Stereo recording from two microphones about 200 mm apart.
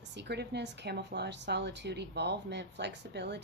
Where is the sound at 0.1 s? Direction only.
55° right (ahead or behind).